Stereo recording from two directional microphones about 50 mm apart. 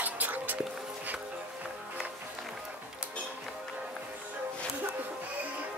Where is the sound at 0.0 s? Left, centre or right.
Right.